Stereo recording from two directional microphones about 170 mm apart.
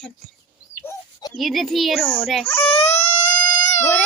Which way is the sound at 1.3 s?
Centre (ahead or behind).